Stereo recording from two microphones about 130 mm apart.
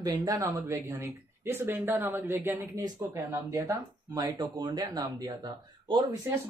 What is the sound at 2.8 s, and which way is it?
Speech, 30° right (ahead or behind).